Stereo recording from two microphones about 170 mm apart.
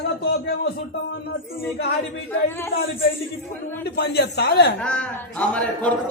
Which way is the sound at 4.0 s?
75° left (ahead or behind).